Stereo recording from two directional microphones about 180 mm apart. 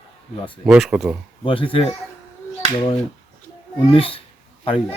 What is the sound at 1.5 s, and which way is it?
Speech, 30° left (ahead or behind).